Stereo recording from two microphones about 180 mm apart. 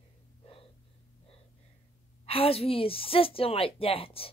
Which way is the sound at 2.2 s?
30° left (ahead or behind).